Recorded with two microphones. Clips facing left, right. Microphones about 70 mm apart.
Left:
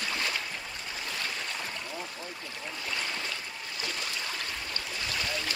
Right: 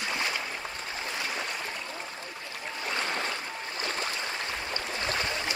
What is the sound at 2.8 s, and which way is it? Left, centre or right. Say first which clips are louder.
Stream: right 5 dB; right.